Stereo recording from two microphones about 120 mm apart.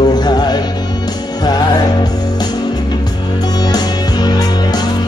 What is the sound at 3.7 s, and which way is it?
Music, 35° left (ahead or behind).